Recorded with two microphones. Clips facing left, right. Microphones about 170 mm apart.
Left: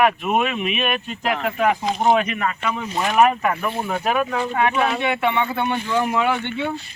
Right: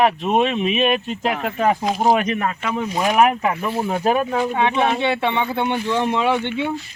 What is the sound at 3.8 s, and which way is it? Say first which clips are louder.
Speech: right 3 dB; 30° right (ahead or behind).